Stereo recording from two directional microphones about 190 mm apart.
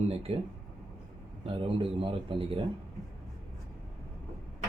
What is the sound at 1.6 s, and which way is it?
A man's voice, 30° right (ahead or behind).